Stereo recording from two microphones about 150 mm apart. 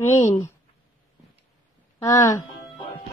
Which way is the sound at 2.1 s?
20° left (ahead or behind).